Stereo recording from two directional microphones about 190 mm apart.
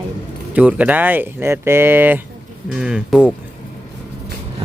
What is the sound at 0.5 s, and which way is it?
Speech, 5° right (ahead or behind).